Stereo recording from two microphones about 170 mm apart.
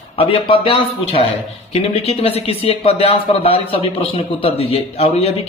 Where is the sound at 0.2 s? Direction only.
30° left (ahead or behind).